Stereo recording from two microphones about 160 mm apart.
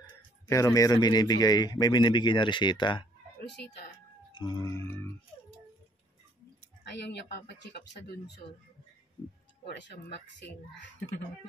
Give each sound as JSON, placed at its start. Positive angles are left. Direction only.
{"t": 0.5, "sound": "a man's voice", "side_deg": 20}
{"t": 4.3, "sound": "speech", "side_deg": 25}
{"t": 6.8, "sound": "speech", "side_deg": 90}
{"t": 9.7, "sound": "speech", "side_deg": 90}